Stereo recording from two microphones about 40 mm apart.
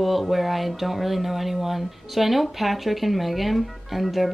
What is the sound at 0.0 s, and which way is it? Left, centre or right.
Speech, centre.